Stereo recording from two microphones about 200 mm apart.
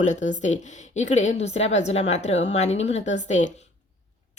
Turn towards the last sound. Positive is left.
turn(degrees=35)  # may be behind; listen again after turning